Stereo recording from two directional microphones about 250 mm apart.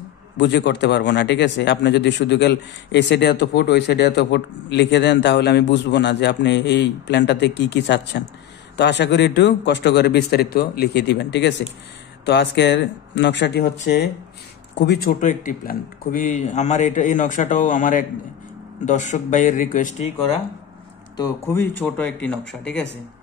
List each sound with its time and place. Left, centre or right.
0.4 s a man's voice: left
21.2 s speech: centre